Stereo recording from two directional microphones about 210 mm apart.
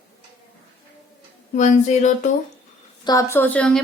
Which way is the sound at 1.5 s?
35° left (ahead or behind).